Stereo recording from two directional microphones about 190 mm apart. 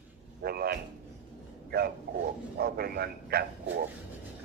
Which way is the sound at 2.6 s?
55° right (ahead or behind).